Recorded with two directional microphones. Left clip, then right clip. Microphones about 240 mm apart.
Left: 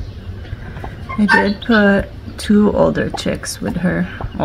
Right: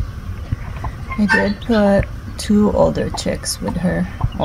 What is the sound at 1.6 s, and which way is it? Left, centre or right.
Speech, centre.